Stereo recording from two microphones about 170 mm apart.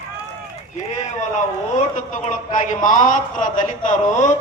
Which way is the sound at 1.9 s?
50° left (ahead or behind).